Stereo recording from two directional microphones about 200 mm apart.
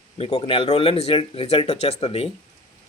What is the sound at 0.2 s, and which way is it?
Speech, 25° left (ahead or behind).